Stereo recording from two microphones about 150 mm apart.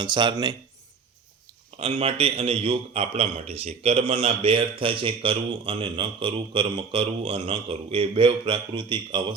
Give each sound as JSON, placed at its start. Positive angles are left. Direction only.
{"t": 0.0, "sound": "speech", "side_deg": -30}
{"t": 1.8, "sound": "a man's voice", "side_deg": -40}